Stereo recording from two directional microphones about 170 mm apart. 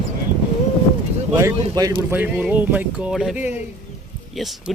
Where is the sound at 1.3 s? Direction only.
20° right (ahead or behind).